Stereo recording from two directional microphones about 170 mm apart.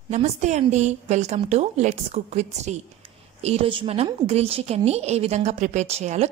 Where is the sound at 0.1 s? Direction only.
40° right (ahead or behind).